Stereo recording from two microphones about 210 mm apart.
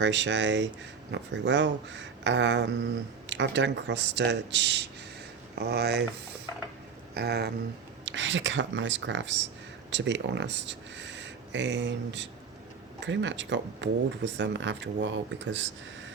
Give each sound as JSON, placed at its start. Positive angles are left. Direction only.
{"t": 0.0, "sound": "speech", "side_deg": -60}
{"t": 7.1, "sound": "speech", "side_deg": -50}
{"t": 8.0, "sound": "speech", "side_deg": -60}